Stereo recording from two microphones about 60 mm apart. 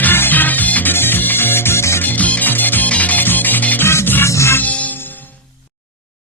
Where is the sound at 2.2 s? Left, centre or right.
Left.